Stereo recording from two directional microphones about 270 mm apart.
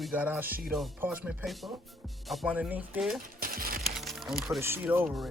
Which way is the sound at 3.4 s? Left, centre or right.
Right.